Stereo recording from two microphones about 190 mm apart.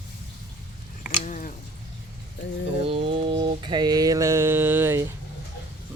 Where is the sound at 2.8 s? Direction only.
30° right (ahead or behind); by 5.1 s 10° right (ahead or behind).